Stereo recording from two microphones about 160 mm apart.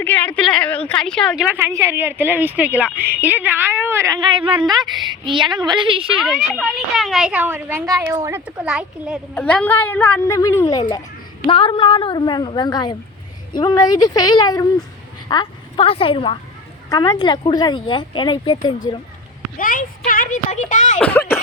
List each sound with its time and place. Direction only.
0.0 s a sound: 10° left (ahead or behind)
0.9 s a woman's voice: 5° left (ahead or behind)
1.5 s a woman's voice: 20° right (ahead or behind)
6.1 s speech: centre (ahead or behind)
9.3 s a woman's voice: 10° left (ahead or behind); by 18.7 s 30° left (ahead or behind)
19.5 s a woman's voice: 60° left (ahead or behind)
21.0 s a woman's voice: 10° left (ahead or behind)